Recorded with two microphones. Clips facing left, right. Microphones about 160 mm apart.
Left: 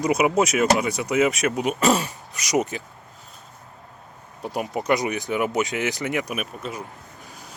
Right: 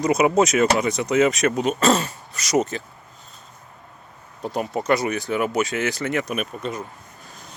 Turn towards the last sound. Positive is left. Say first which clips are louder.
# right 3 dB
turn(degrees=5)  # may be behind; listen again after turning